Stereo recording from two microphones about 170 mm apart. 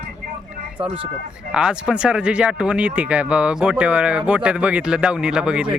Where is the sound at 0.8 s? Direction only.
30° right (ahead or behind).